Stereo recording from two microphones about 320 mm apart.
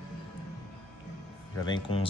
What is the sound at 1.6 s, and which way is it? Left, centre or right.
Speech, centre.